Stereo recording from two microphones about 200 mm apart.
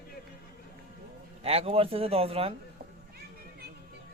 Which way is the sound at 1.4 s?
30° right (ahead or behind).